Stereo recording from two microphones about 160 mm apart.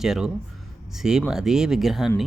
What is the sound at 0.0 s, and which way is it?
Speech, 5° right (ahead or behind).